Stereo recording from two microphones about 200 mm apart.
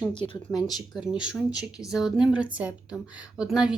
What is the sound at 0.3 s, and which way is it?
Speech, 20° left (ahead or behind).